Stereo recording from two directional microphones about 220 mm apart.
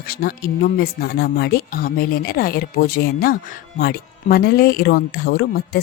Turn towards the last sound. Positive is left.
turn(degrees=45)  # may be behind; listen again after turning